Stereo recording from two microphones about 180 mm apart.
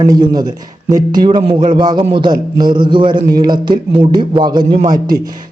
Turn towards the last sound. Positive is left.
turn(degrees=-25)  # may be behind; listen again after turning